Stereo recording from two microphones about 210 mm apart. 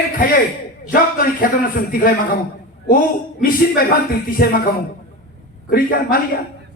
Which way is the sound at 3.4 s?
45° left (ahead or behind).